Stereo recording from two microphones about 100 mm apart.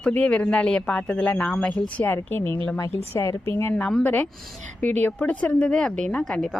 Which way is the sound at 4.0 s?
15° left (ahead or behind).